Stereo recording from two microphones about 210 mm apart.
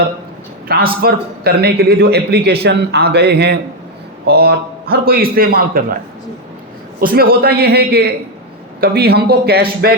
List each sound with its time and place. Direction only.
0.7 s a man's voice: 45° right (ahead or behind)
7.0 s a man's voice: 45° right (ahead or behind)